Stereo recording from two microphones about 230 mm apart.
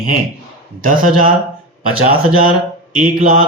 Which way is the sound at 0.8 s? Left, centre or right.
Right.